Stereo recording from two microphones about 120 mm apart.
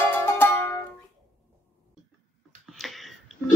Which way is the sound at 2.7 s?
Centre (ahead or behind).